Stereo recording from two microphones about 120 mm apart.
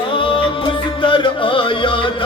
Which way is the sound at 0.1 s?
45° left (ahead or behind).